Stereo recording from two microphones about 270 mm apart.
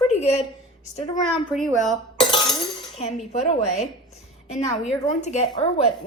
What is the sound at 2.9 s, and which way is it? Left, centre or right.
Speech, left.